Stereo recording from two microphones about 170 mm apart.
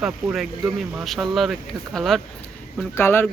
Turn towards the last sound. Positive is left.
turn(degrees=15)  # may be behind; listen again after turning